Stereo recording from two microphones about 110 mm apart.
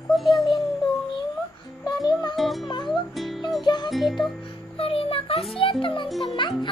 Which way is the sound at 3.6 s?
40° left (ahead or behind).